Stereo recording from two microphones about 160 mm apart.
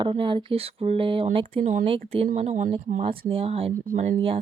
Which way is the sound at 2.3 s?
50° right (ahead or behind).